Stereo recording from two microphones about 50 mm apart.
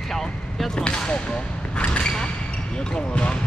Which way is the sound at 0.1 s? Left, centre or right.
Centre.